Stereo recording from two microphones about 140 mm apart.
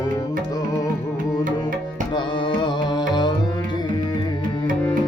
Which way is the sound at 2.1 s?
30° left (ahead or behind).